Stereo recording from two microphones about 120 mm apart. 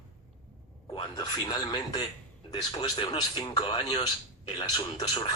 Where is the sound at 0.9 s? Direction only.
35° left (ahead or behind).